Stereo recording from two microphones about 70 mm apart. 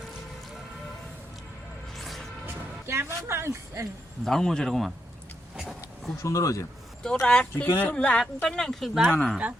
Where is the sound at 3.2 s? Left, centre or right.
Right.